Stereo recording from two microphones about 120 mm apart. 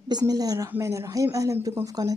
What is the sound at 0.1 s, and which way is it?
A woman's voice, 30° right (ahead or behind).